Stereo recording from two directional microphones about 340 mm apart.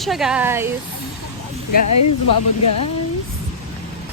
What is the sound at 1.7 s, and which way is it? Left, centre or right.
Speech, left.